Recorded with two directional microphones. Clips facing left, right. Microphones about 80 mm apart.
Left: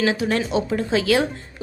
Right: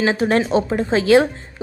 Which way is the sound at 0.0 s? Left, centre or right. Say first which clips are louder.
Right 4 dB; right.